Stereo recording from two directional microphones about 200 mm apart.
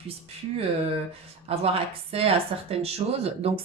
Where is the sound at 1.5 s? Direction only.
30° right (ahead or behind).